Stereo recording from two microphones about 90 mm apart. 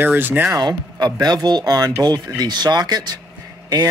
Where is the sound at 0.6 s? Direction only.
50° right (ahead or behind).